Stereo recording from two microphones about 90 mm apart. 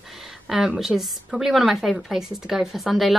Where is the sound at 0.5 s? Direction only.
5° right (ahead or behind).